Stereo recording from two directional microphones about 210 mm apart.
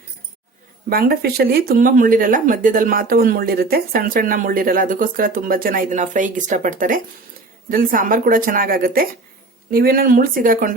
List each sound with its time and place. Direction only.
0.9 s speech: 45° right (ahead or behind)